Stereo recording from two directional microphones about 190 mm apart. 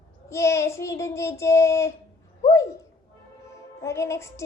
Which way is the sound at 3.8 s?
15° left (ahead or behind).